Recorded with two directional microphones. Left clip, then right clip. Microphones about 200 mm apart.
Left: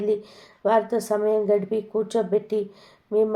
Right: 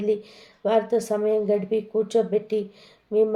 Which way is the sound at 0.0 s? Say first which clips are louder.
Even; 20° left (ahead or behind).